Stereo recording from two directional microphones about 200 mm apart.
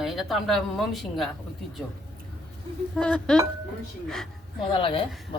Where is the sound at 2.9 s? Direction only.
5° left (ahead or behind).